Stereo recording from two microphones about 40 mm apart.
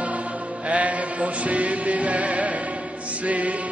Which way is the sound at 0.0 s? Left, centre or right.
Right.